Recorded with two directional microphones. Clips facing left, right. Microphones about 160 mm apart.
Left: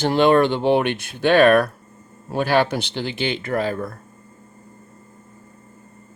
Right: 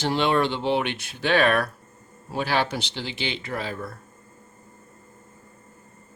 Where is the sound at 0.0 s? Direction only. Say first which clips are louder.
Left 7 dB; 50° left (ahead or behind).